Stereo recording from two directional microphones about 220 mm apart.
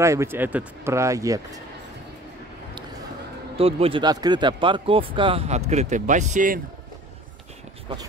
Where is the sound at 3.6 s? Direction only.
25° right (ahead or behind).